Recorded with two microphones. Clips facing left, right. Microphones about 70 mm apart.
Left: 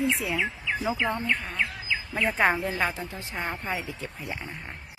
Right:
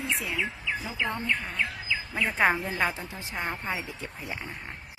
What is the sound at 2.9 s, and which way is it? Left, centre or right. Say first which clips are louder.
A woman's voice: left 1 dB; centre.